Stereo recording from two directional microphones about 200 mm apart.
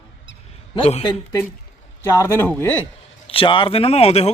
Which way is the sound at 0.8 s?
30° left (ahead or behind).